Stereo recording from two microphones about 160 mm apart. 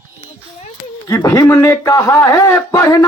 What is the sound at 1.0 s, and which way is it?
A man's voice, 20° left (ahead or behind).